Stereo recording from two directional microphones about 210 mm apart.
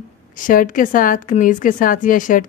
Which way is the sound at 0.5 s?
40° left (ahead or behind).